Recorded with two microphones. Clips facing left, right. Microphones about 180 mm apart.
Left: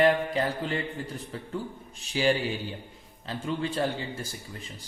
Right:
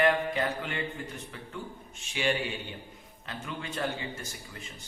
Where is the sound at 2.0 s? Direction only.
35° left (ahead or behind).